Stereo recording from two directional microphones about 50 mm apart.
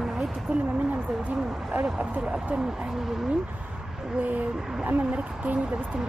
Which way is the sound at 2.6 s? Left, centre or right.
Centre.